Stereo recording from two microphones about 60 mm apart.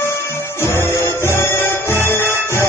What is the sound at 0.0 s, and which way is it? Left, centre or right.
Music, left.